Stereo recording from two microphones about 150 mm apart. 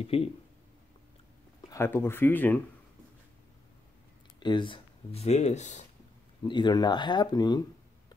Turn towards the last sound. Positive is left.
turn(degrees=25)  # may be behind; listen again after turning